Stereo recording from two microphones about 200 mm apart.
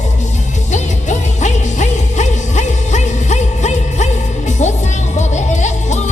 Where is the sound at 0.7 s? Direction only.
35° left (ahead or behind).